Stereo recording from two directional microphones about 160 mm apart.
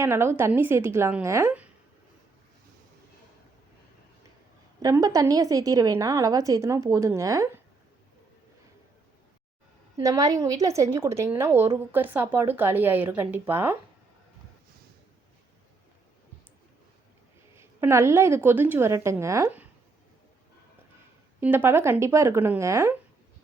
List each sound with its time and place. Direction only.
0.0 s a woman's voice: 15° right (ahead or behind)
4.8 s a woman's voice: 20° right (ahead or behind)
10.0 s a woman's voice: 20° right (ahead or behind)
17.6 s a woman's voice: 15° right (ahead or behind)
21.4 s a woman's voice: 10° right (ahead or behind)